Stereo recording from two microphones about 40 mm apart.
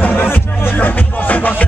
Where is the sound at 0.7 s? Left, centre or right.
Left.